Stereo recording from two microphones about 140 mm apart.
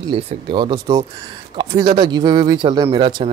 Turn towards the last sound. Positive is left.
turn(degrees=-35)  # may be behind; listen again after turning